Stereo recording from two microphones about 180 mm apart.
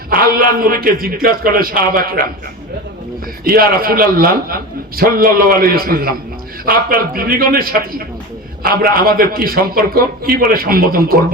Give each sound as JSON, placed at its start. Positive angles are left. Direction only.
{"t": 0.1, "sound": "a man's voice", "side_deg": -55}
{"t": 3.4, "sound": "a man's voice", "side_deg": -55}